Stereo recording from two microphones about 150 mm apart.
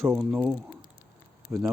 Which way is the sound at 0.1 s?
10° right (ahead or behind).